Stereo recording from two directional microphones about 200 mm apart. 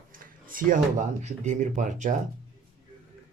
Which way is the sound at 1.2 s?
35° right (ahead or behind).